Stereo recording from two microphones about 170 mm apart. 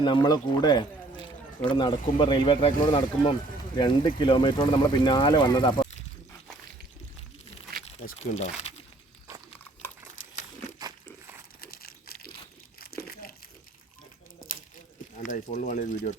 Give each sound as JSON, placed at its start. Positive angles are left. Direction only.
{"t": 0.0, "sound": "speech", "side_deg": 25}
{"t": 8.2, "sound": "speech", "side_deg": 40}
{"t": 10.1, "sound": "crumpling", "side_deg": 45}
{"t": 11.6, "sound": "crumpling", "side_deg": 60}
{"t": 15.2, "sound": "speech", "side_deg": 50}